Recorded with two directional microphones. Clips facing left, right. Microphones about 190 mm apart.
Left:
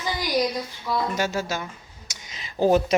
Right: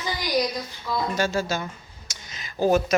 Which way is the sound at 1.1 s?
15° left (ahead or behind).